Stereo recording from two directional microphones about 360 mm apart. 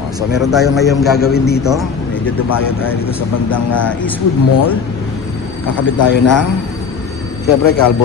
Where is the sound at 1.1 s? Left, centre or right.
Left.